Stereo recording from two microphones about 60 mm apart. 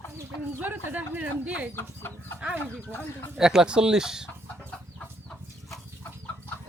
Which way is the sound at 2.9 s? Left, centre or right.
Left.